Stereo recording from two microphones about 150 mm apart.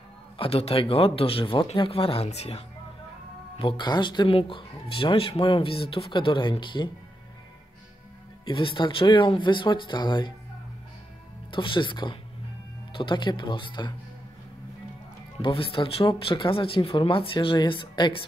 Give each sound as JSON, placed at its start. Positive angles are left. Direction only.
{"t": 0.4, "sound": "speech", "side_deg": 40}
{"t": 3.5, "sound": "speech", "side_deg": 35}
{"t": 8.5, "sound": "speech", "side_deg": 35}
{"t": 11.5, "sound": "speech", "side_deg": 35}
{"t": 15.4, "sound": "speech", "side_deg": 35}